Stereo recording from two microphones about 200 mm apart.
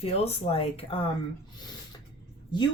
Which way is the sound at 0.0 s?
30° left (ahead or behind).